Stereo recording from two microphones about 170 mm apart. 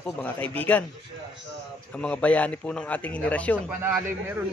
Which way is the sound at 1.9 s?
5° left (ahead or behind).